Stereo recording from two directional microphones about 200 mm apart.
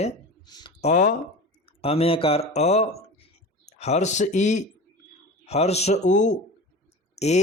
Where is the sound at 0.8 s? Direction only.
35° left (ahead or behind).